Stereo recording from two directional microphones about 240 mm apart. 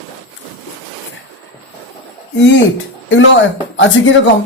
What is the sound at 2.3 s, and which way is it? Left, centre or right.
Speech, left.